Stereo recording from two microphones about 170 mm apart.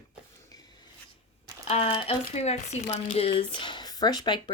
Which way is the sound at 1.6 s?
35° left (ahead or behind).